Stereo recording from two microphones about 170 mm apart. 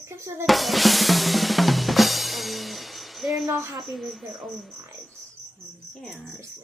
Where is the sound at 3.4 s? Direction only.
15° right (ahead or behind).